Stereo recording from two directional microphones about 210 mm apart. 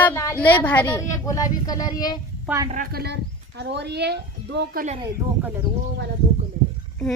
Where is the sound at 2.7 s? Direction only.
45° right (ahead or behind).